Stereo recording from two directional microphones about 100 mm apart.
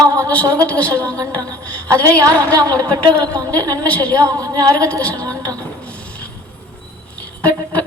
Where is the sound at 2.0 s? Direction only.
35° right (ahead or behind).